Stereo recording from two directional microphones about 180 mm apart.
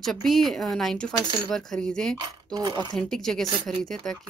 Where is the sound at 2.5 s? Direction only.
25° right (ahead or behind).